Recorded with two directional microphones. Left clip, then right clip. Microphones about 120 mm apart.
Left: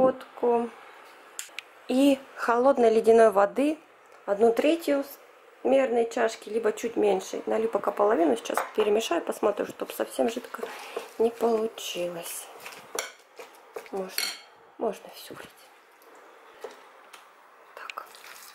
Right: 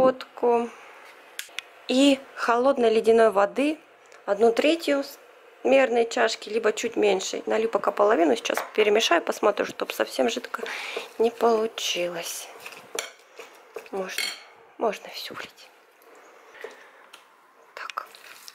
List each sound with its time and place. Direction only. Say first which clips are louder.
0.0 s a sound: right 2 dB; centre (ahead or behind)
1.9 s a woman's voice: right 2 dB; 5° right (ahead or behind)
14.8 s speech: right 4 dB; 10° right (ahead or behind)